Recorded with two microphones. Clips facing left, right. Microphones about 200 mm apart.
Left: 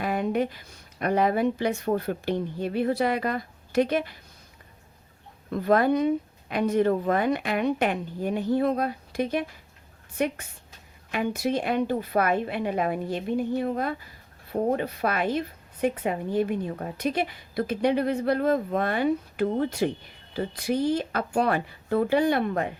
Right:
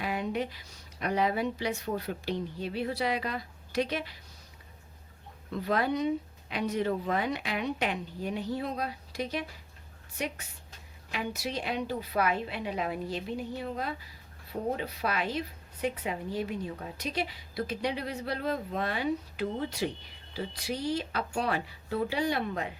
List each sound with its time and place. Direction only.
0.0 s a woman's voice: 50° left (ahead or behind)
5.5 s a woman's voice: 50° left (ahead or behind)